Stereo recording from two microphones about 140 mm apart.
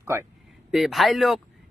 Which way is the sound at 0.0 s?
20° right (ahead or behind).